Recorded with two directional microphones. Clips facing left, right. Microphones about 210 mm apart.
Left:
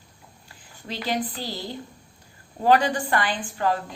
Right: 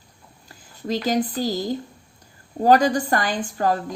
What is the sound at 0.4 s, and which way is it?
Speech, 40° right (ahead or behind).